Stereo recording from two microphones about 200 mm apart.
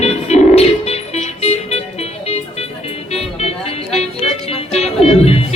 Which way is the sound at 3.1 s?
30° left (ahead or behind).